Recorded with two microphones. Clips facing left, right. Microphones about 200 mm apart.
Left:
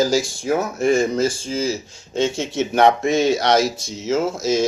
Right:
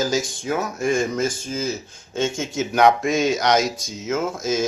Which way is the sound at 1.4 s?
30° left (ahead or behind).